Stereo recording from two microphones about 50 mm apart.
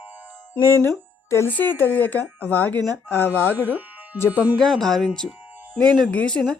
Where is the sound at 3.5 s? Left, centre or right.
Right.